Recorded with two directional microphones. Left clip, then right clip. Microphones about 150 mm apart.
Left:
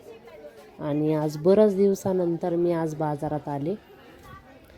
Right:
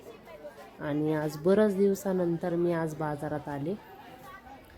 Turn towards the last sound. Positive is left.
turn(degrees=20)  # may be behind; listen again after turning